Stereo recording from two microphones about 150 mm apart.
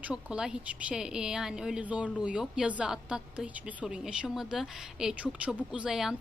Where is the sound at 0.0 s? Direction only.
5° right (ahead or behind).